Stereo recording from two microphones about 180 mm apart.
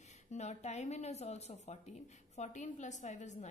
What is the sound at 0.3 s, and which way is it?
A woman's voice, 40° left (ahead or behind).